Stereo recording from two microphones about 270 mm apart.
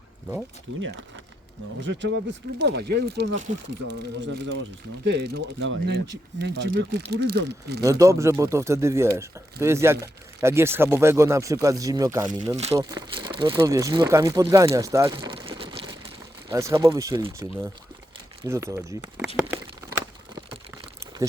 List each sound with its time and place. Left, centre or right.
0.8 s speech: right
7.9 s speech: centre
12.5 s speech: right
14.7 s crumpling: centre
16.5 s speech: centre